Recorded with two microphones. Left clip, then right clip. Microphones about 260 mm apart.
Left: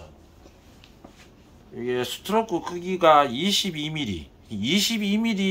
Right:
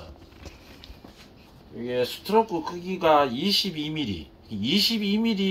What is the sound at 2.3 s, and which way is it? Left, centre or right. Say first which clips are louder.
Speech: right 1 dB; centre.